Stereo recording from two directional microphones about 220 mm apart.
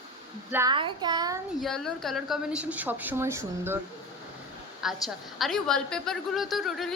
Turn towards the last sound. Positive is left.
turn(degrees=0)  # may be behind; listen again after turning